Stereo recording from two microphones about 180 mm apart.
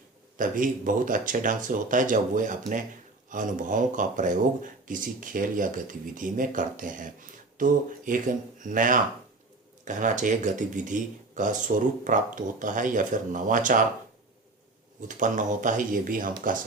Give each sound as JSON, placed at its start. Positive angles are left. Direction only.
{"t": 0.3, "sound": "speech", "side_deg": -50}
{"t": 15.0, "sound": "speech", "side_deg": -45}